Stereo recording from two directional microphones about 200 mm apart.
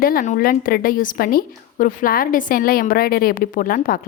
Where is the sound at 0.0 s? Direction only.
45° left (ahead or behind).